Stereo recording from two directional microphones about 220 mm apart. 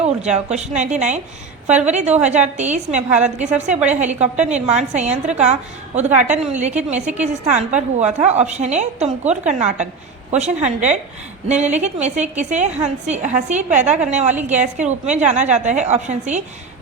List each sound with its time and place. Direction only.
0.0 s a woman's voice: 30° right (ahead or behind)